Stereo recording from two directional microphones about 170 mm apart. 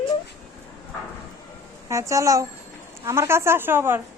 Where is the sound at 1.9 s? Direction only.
20° right (ahead or behind).